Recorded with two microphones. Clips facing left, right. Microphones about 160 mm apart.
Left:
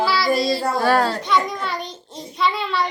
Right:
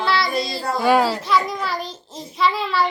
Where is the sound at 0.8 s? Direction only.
10° right (ahead or behind).